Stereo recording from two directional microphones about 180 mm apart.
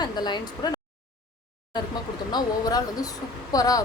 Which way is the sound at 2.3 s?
20° left (ahead or behind).